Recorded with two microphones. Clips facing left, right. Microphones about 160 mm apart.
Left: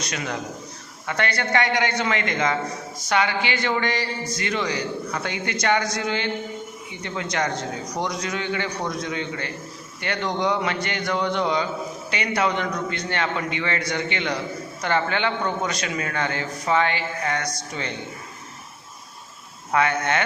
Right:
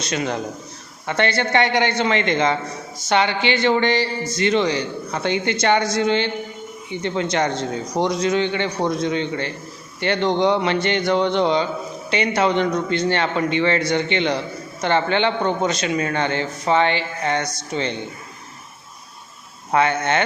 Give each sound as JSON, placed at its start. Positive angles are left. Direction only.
{"t": 0.0, "sound": "a man's voice", "side_deg": -30}
{"t": 19.7, "sound": "a man's voice", "side_deg": -25}